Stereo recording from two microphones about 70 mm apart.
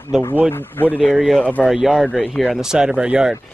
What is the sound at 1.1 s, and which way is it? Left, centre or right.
Speech, centre.